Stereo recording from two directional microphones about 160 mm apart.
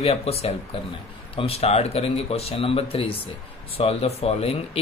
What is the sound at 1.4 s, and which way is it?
Speech, 40° left (ahead or behind).